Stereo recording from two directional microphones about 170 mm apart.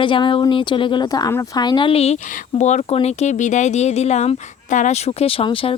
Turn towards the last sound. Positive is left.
turn(degrees=35)  # may be behind; listen again after turning